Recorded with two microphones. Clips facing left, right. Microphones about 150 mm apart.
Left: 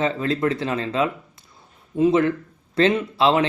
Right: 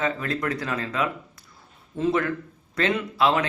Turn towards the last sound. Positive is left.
turn(degrees=25)  # may be behind; listen again after turning